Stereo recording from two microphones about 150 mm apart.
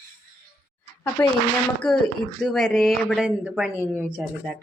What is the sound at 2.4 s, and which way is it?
Speech, centre (ahead or behind).